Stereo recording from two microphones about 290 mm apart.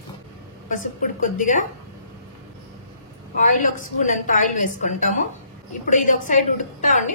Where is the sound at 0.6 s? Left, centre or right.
Left.